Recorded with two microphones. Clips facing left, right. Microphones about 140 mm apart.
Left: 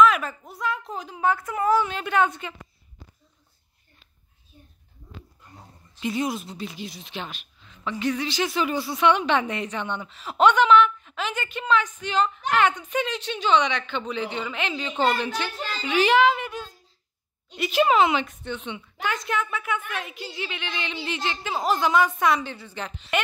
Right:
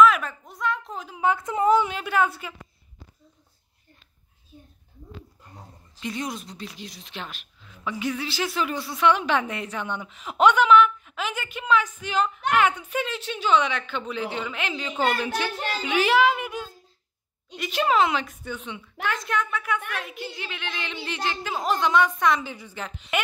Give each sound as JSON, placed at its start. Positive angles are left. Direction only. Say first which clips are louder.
{"t": 0.0, "sound": "a sound", "louder": "right 1 dB", "side_deg": 0}
{"t": 1.2, "sound": "a woman's voice", "louder": "right 2 dB", "side_deg": -20}
{"t": 2.0, "sound": "speech", "louder": "left 1 dB", "side_deg": -5}
{"t": 5.9, "sound": "a woman's voice", "louder": "left 5 dB", "side_deg": 5}
{"t": 17.6, "sound": "speech", "louder": "left 2 dB", "side_deg": 5}
{"t": 22.5, "sound": "a woman's voice", "louder": "left 1 dB", "side_deg": -10}